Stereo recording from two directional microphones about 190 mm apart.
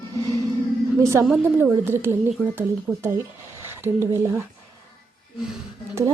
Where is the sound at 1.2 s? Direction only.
Centre (ahead or behind).